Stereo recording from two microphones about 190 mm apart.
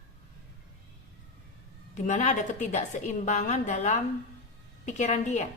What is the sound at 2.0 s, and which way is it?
A woman's voice, 40° left (ahead or behind).